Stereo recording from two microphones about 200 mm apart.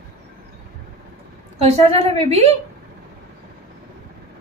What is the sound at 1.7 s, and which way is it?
Speech, 30° right (ahead or behind).